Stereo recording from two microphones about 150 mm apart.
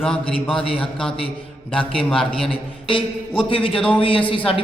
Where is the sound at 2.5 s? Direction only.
35° left (ahead or behind).